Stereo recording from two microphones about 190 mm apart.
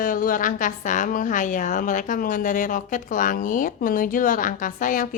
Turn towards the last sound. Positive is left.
turn(degrees=45)  # may be behind; listen again after turning